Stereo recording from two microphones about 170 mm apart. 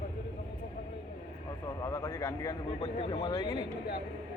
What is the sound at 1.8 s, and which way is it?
Speech, 15° left (ahead or behind).